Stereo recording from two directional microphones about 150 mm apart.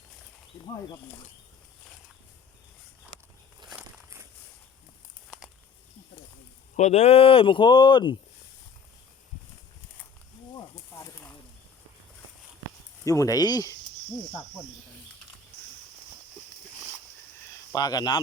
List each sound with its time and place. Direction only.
6.7 s speech: 50° left (ahead or behind); by 8.2 s 30° left (ahead or behind)
11.0 s snake: 15° left (ahead or behind)
13.1 s speech: 20° left (ahead or behind)
17.7 s speech: 25° left (ahead or behind)